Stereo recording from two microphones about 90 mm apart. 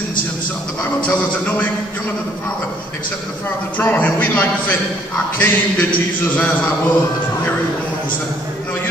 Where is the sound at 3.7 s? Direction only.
20° left (ahead or behind).